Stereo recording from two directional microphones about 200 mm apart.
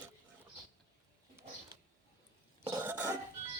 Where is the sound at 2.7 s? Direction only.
15° right (ahead or behind).